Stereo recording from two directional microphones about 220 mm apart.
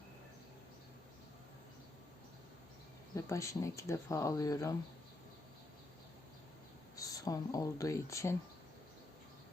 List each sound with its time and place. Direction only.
3.2 s speech: 15° left (ahead or behind)
6.9 s speech: 15° left (ahead or behind)